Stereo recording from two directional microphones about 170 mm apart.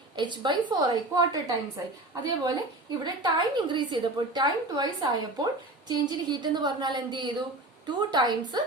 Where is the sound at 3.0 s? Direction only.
25° right (ahead or behind).